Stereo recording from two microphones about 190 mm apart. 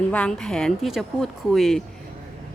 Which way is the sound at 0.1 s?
5° left (ahead or behind).